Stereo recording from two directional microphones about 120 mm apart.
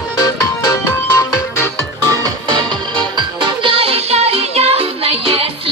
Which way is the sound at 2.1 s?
35° right (ahead or behind).